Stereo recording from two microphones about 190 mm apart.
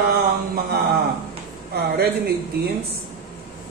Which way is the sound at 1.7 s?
55° right (ahead or behind).